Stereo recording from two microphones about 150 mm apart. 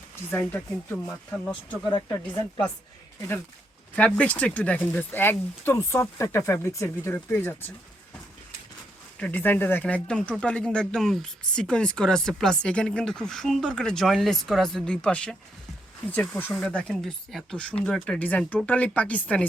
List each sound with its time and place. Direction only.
0.3 s speech: 15° left (ahead or behind)
1.9 s speech: 25° left (ahead or behind)
9.1 s speech: 10° left (ahead or behind)